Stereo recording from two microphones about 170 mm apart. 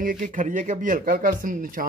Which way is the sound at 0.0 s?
55° right (ahead or behind).